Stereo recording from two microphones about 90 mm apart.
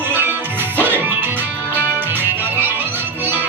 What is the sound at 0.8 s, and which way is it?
Music, 20° right (ahead or behind).